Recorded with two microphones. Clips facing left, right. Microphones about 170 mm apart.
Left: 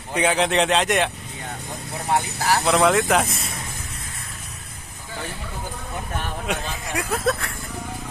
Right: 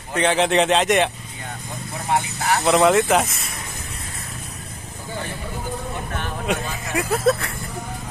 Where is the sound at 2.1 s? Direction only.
30° left (ahead or behind).